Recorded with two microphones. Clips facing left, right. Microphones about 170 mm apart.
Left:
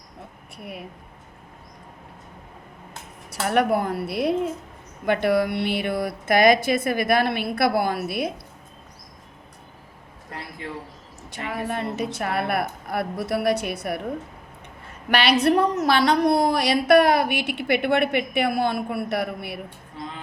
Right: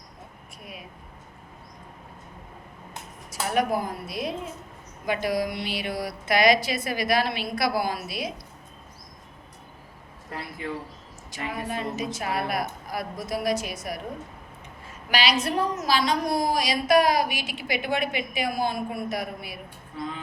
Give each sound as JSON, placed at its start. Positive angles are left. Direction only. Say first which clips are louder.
{"t": 0.6, "sound": "a woman's voice", "louder": "left 7 dB", "side_deg": 65}
{"t": 3.4, "sound": "a woman's voice", "louder": "left 4 dB", "side_deg": 65}
{"t": 11.3, "sound": "a woman's voice", "louder": "left 3 dB", "side_deg": 60}